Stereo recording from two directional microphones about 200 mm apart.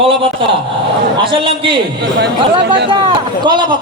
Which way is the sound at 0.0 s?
25° right (ahead or behind).